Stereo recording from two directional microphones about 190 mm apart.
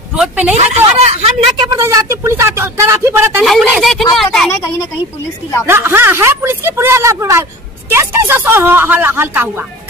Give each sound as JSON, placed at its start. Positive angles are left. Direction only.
{"t": 0.1, "sound": "speech", "side_deg": -5}
{"t": 0.6, "sound": "a sound", "side_deg": -35}
{"t": 1.6, "sound": "speech", "side_deg": -15}
{"t": 3.4, "sound": "speech", "side_deg": 0}
{"t": 5.7, "sound": "speech", "side_deg": -10}